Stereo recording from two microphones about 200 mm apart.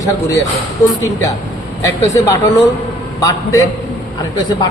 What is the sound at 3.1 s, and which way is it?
Speech, 15° left (ahead or behind).